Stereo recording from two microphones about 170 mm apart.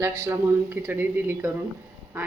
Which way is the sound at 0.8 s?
10° right (ahead or behind).